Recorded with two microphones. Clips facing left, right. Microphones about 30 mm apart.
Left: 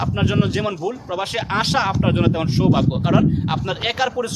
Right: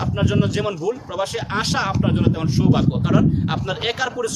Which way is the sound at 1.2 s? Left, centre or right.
Left.